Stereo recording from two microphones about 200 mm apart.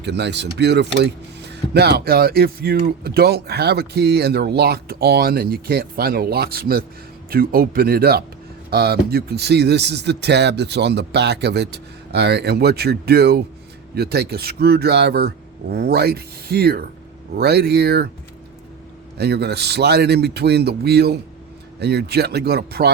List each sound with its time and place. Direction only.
0.0 s speech: 60° right (ahead or behind)
19.1 s speech: 55° right (ahead or behind)